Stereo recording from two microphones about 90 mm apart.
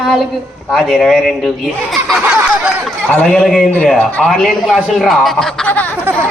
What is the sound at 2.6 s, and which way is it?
Speech, 20° right (ahead or behind).